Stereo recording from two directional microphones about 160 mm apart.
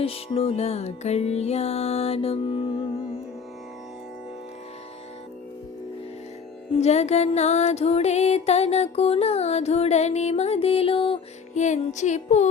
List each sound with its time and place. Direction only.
0.0 s music: 35° left (ahead or behind)
6.7 s music: 45° left (ahead or behind)
11.5 s music: 50° left (ahead or behind)